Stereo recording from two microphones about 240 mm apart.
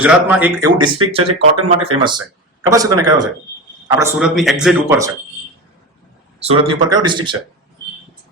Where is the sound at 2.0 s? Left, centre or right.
Centre.